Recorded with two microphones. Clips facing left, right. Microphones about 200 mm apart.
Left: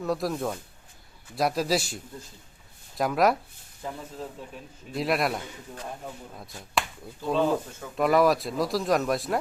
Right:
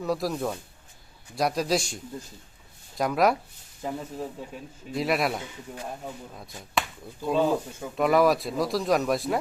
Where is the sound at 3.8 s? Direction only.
15° right (ahead or behind).